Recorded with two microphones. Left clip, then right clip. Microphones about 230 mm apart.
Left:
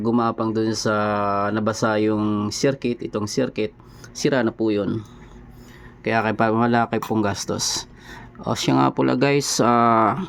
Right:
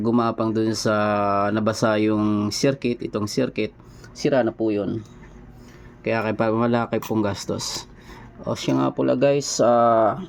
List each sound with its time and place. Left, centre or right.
0.0 s speech: centre
4.1 s speech: centre